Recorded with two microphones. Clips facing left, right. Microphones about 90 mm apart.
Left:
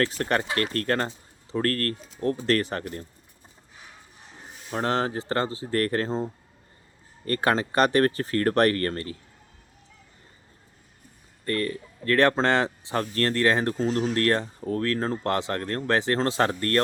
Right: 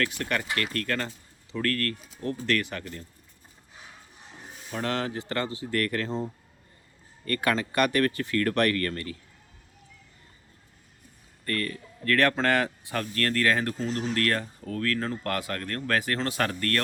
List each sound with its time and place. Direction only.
0.0 s speech: 35° left (ahead or behind)
4.7 s speech: 30° left (ahead or behind)
7.3 s speech: 30° left (ahead or behind)
11.4 s speech: 25° left (ahead or behind)
13.8 s speech: 35° left (ahead or behind)